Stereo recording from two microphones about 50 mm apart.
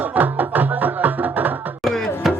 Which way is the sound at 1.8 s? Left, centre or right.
Centre.